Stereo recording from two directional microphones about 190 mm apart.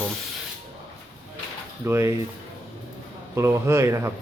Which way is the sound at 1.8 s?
15° right (ahead or behind).